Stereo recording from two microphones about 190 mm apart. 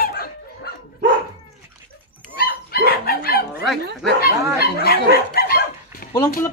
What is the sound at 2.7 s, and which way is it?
Chicken, 50° left (ahead or behind).